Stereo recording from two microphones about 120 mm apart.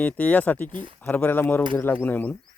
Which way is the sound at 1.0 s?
15° left (ahead or behind).